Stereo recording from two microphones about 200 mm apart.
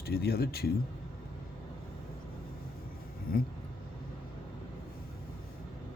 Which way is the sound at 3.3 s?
45° left (ahead or behind).